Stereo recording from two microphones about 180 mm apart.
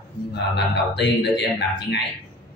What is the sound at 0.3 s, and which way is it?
Speech, 70° left (ahead or behind).